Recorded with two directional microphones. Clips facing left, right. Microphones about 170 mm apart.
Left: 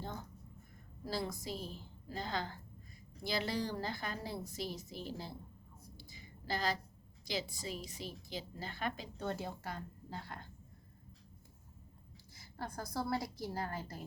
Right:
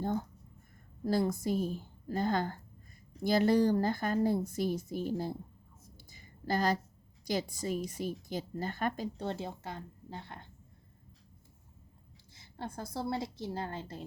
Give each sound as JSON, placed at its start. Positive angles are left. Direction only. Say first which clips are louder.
{"t": 0.0, "sound": "a sound", "louder": "right 11 dB", "side_deg": -50}
{"t": 1.0, "sound": "a woman's voice", "louder": "right 10 dB", "side_deg": -50}
{"t": 6.0, "sound": "a sound", "louder": "right 1 dB", "side_deg": -50}
{"t": 7.3, "sound": "a woman's voice", "louder": "right 7 dB", "side_deg": -50}
{"t": 9.1, "sound": "a woman's voice", "louder": "right 3 dB", "side_deg": -25}
{"t": 12.3, "sound": "a woman's voice", "louder": "right 3 dB", "side_deg": -25}